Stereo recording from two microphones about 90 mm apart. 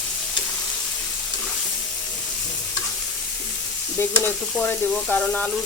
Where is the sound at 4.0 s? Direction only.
25° left (ahead or behind).